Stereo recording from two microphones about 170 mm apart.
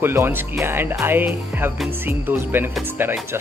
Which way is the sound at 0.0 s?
15° right (ahead or behind).